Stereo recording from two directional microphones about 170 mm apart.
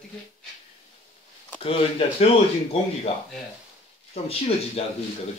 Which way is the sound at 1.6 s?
35° left (ahead or behind).